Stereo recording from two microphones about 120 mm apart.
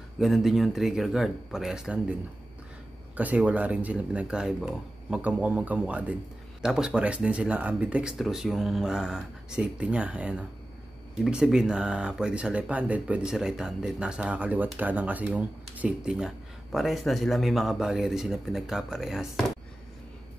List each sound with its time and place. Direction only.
0.2 s speech: centre (ahead or behind)
3.2 s speech: 10° right (ahead or behind)